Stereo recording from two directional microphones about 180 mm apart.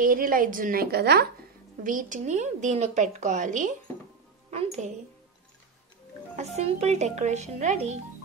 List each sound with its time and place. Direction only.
0.0 s a woman's voice: 50° right (ahead or behind)
1.8 s a woman's voice: 50° right (ahead or behind)
6.3 s a woman's voice: 40° right (ahead or behind)